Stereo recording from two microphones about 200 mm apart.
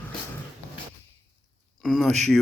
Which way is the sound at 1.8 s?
Centre (ahead or behind).